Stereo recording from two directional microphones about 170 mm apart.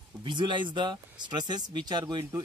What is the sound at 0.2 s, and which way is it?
Speech, 25° right (ahead or behind).